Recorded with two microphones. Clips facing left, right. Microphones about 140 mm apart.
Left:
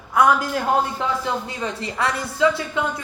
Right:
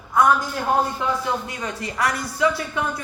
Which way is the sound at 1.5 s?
30° left (ahead or behind).